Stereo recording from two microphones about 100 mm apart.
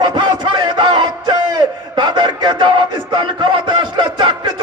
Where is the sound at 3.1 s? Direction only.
55° right (ahead or behind).